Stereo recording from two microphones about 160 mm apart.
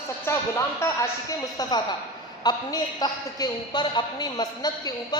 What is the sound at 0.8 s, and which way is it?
A man's voice, 15° left (ahead or behind).